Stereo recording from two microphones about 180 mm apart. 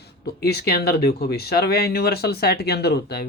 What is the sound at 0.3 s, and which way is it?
Speech, 65° left (ahead or behind).